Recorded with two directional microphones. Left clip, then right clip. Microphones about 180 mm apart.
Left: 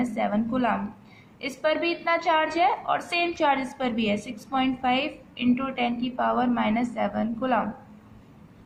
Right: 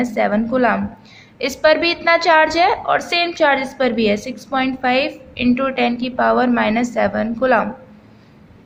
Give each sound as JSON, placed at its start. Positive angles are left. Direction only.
{"t": 0.0, "sound": "a woman's voice", "side_deg": -25}